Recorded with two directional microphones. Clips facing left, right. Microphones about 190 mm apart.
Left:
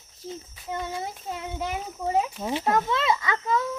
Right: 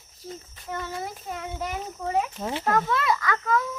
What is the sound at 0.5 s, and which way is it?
A child's voice, 15° left (ahead or behind).